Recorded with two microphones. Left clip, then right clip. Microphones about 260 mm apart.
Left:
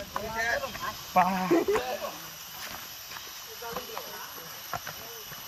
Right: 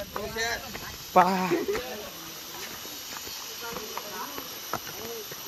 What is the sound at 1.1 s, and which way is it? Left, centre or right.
Speech, centre.